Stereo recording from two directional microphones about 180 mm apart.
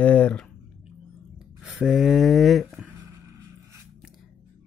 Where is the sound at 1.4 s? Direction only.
5° right (ahead or behind).